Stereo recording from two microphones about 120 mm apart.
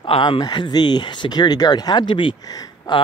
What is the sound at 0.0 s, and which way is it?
Speech, 45° left (ahead or behind).